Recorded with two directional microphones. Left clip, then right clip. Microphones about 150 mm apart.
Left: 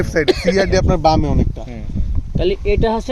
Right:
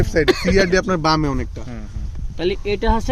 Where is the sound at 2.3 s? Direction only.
50° right (ahead or behind).